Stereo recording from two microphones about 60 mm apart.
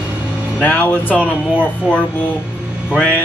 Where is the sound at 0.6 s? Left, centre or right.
Left.